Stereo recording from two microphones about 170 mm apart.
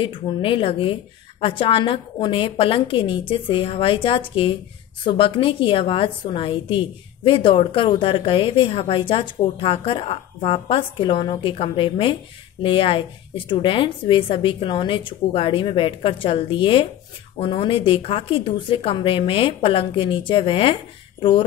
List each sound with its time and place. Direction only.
0.0 s a woman's voice: 30° left (ahead or behind)